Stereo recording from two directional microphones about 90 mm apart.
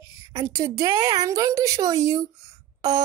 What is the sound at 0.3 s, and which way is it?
A woman's voice, 35° right (ahead or behind).